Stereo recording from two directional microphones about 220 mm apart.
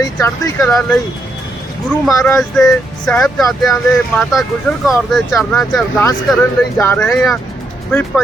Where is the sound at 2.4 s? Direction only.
Centre (ahead or behind).